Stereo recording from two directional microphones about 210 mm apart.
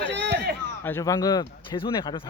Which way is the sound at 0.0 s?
55° right (ahead or behind).